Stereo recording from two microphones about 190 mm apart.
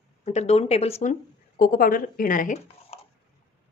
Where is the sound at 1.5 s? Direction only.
50° left (ahead or behind).